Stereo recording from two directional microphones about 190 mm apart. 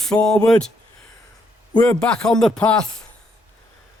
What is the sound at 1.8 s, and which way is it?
Speech, 5° left (ahead or behind).